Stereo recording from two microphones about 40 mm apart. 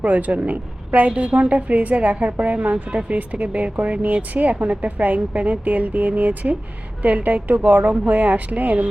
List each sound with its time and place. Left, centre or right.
0.0 s a woman's voice: right